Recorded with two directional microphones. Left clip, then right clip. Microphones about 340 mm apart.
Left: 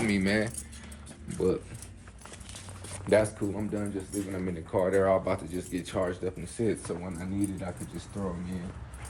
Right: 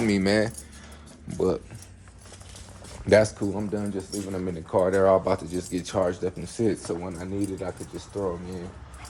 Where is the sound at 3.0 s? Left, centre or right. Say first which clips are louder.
Right 5 dB; right.